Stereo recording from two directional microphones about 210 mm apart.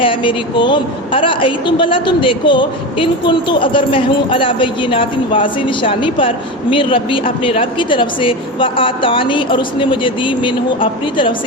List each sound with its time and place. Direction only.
0.0 s a woman's voice: 25° left (ahead or behind)